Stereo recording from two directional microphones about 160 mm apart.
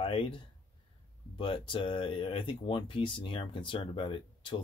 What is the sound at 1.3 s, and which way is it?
Speech, 30° left (ahead or behind).